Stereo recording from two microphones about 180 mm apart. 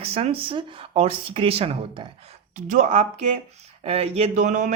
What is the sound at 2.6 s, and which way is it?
Speech, 45° right (ahead or behind).